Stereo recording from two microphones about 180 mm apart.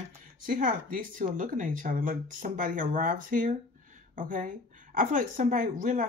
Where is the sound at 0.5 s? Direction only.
50° right (ahead or behind).